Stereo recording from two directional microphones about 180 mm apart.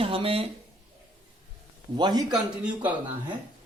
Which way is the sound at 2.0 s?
25° right (ahead or behind).